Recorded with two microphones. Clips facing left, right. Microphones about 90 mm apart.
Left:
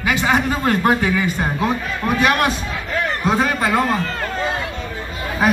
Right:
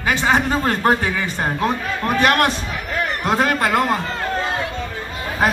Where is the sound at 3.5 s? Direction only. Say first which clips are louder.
Right 1 dB; 60° right (ahead or behind).